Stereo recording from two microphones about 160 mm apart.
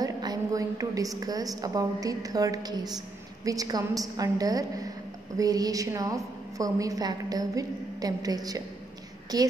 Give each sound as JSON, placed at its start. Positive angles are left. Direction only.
{"t": 0.0, "sound": "a woman's voice", "side_deg": -25}